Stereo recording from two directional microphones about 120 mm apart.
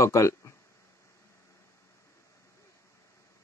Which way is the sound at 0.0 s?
25° left (ahead or behind).